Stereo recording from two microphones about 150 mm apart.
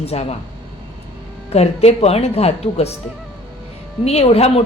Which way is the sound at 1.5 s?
45° left (ahead or behind).